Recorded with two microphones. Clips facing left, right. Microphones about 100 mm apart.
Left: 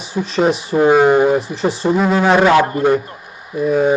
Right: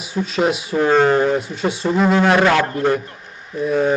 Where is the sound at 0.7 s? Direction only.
15° left (ahead or behind).